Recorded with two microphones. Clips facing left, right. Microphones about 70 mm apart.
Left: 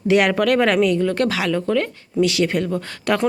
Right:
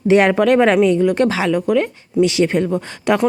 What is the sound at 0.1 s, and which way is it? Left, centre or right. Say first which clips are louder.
Speech: right 4 dB; right.